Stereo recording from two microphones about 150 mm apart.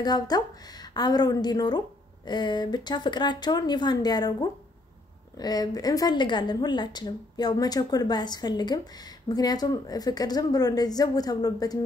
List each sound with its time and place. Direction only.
0.0 s a woman's voice: 25° left (ahead or behind)